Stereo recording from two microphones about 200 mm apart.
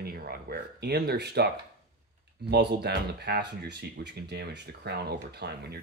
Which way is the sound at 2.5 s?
55° right (ahead or behind).